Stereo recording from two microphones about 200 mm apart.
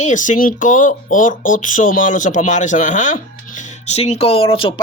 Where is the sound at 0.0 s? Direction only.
40° left (ahead or behind).